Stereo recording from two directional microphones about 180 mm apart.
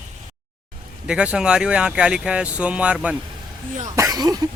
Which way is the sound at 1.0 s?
5° right (ahead or behind).